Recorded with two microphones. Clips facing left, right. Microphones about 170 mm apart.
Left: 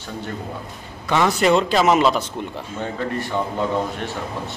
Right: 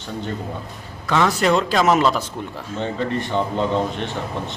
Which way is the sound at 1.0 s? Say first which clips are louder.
Left 1 dB; 5° left (ahead or behind).